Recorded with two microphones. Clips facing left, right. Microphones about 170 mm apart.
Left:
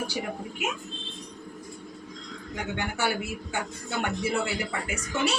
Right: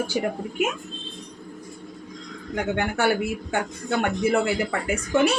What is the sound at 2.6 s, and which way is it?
A man's voice, 55° right (ahead or behind).